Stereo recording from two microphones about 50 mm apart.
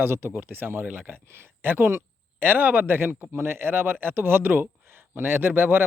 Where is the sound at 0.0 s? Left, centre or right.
Right.